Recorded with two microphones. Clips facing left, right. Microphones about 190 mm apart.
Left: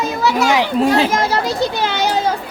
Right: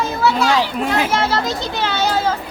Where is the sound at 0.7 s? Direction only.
30° left (ahead or behind).